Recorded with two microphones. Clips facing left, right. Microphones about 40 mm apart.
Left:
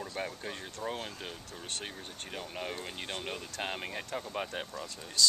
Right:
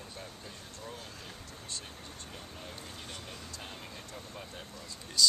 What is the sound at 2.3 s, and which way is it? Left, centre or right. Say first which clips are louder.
Speech: left 11 dB; left.